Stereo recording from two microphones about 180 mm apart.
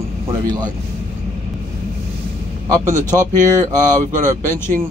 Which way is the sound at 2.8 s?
45° right (ahead or behind).